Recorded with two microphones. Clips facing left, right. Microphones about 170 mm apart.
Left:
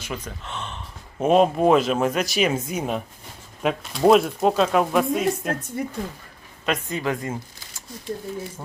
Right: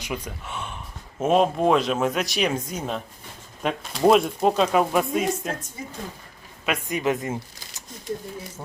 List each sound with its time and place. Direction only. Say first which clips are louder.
0.0 s a sound: right 1 dB; 10° right (ahead or behind)
1.2 s speech: left 2 dB; centre (ahead or behind)
6.7 s speech: right 1 dB; 15° right (ahead or behind)